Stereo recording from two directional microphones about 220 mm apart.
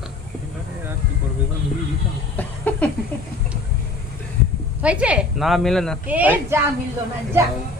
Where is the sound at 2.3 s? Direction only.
5° left (ahead or behind).